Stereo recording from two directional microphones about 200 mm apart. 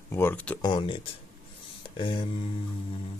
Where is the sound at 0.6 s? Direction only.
25° left (ahead or behind).